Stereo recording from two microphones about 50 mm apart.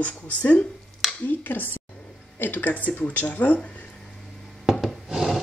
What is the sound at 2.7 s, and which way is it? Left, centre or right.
Speech, left.